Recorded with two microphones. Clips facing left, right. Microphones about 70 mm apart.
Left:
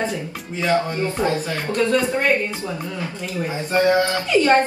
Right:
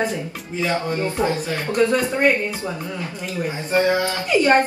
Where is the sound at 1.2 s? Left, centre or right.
Right.